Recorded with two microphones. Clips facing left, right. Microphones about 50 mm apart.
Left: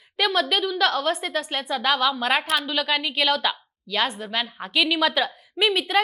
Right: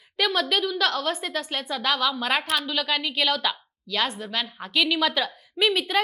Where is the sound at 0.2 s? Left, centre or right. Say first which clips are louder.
Left 2 dB; centre.